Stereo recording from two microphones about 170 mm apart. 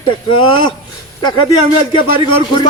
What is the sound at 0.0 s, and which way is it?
A man's voice, 30° left (ahead or behind).